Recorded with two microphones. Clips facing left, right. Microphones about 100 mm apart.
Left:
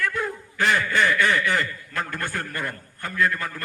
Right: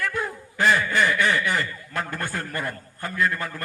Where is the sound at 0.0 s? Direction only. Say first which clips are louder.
Left 1 dB; 25° right (ahead or behind).